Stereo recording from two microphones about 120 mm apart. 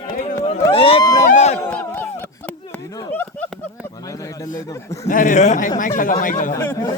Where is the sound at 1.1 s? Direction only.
70° left (ahead or behind).